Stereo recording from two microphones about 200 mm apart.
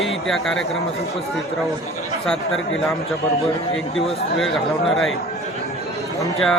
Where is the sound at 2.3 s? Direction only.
Centre (ahead or behind).